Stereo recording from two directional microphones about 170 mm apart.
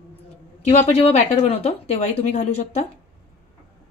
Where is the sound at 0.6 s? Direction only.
40° left (ahead or behind).